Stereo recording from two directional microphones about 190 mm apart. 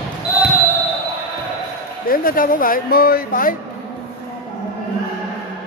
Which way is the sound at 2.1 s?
50° left (ahead or behind).